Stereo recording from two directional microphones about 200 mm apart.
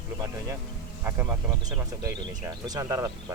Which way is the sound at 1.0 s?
10° right (ahead or behind).